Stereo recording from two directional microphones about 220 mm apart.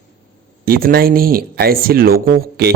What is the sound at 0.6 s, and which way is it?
Speech, 40° right (ahead or behind).